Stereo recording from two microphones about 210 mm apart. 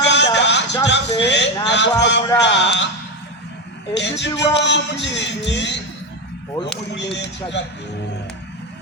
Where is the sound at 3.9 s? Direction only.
55° left (ahead or behind).